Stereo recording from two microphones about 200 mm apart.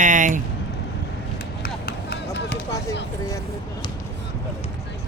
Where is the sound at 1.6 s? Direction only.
50° left (ahead or behind).